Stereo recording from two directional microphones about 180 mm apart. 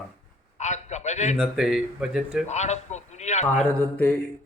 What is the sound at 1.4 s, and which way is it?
Speech, centre (ahead or behind).